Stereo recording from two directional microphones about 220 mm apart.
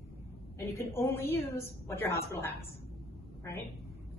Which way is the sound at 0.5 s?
10° left (ahead or behind).